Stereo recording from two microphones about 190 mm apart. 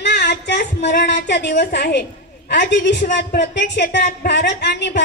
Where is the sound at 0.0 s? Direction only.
60° left (ahead or behind).